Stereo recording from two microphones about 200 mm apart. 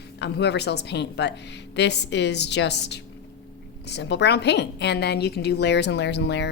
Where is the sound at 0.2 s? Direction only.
55° left (ahead or behind).